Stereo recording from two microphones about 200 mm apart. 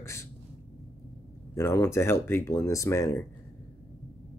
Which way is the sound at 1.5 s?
10° left (ahead or behind).